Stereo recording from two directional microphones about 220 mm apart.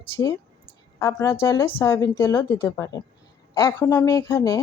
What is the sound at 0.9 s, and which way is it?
A woman's voice, 15° left (ahead or behind).